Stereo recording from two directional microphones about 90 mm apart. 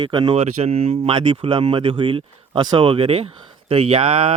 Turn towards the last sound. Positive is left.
turn(degrees=-90)